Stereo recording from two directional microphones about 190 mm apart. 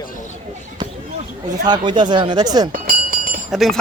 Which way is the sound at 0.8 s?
20° right (ahead or behind).